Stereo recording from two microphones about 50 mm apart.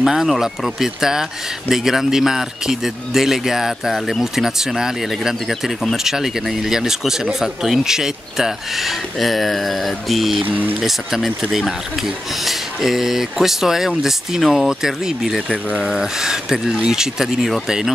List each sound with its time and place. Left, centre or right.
0.0 s speech: centre
10.5 s speech: right
10.8 s speech: centre